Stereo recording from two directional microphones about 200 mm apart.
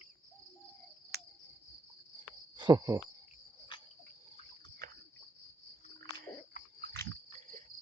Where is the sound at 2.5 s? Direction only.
20° right (ahead or behind).